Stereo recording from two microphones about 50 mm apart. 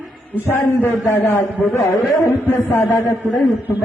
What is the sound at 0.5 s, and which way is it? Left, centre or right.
A man's voice, left.